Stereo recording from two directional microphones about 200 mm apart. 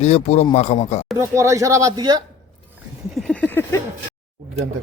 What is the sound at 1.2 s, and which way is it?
Speech, 15° right (ahead or behind).